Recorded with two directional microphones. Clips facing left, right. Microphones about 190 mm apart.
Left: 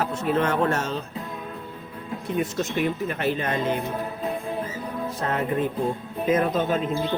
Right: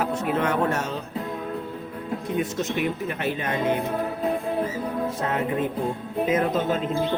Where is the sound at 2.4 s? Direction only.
20° right (ahead or behind).